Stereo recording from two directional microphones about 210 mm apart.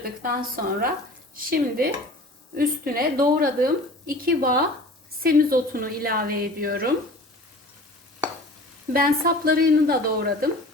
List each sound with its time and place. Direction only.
0.0 s a woman's voice: 45° right (ahead or behind)
8.9 s a woman's voice: 45° right (ahead or behind)